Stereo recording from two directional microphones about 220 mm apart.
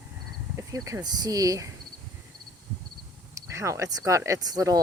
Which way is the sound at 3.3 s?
15° right (ahead or behind).